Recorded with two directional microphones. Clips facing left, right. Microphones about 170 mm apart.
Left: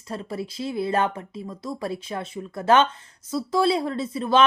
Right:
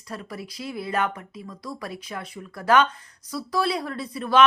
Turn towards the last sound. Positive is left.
turn(degrees=25)  # may be behind; listen again after turning